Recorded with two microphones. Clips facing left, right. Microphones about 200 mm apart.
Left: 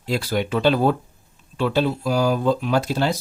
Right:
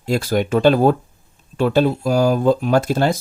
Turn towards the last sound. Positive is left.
turn(degrees=-50)  # may be behind; listen again after turning